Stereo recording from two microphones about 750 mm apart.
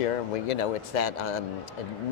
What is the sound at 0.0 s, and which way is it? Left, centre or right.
Speech, left.